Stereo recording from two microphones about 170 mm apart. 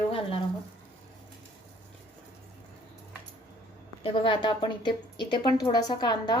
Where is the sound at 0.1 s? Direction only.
30° left (ahead or behind).